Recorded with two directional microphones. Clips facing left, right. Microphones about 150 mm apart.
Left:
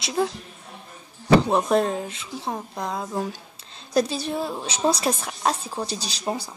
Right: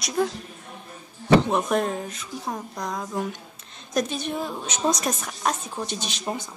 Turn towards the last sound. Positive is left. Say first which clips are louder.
# left 2 dB
turn(degrees=35)  # may be behind; listen again after turning